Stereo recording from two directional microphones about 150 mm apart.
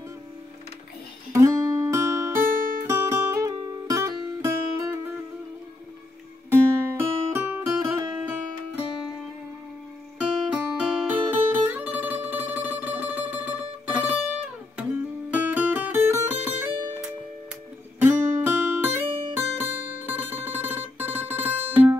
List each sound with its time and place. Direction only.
1.3 s music: 20° right (ahead or behind)
2.3 s music: 65° right (ahead or behind)
2.9 s music: 20° right (ahead or behind)
6.5 s music: 15° right (ahead or behind)
10.1 s guitar: 5° right (ahead or behind)
15.3 s music: 10° right (ahead or behind)
18.0 s guitar: 10° right (ahead or behind)